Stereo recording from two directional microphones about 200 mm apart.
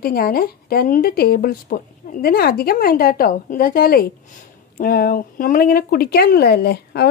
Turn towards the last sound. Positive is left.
turn(degrees=55)  # may be behind; listen again after turning